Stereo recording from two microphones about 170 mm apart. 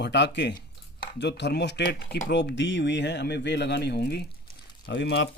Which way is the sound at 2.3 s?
90° left.